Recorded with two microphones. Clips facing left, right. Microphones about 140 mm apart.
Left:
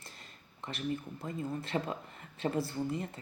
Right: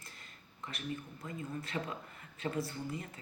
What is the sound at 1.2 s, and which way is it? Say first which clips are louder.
Speech: left 4 dB; 30° left (ahead or behind).